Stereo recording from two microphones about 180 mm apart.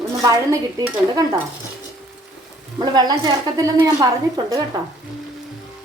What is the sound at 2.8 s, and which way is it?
A woman's voice, 25° right (ahead or behind).